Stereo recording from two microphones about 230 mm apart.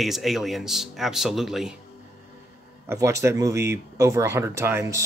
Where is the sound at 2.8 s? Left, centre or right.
Centre.